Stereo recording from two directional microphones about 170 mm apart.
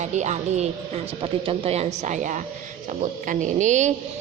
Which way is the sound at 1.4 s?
35° right (ahead or behind).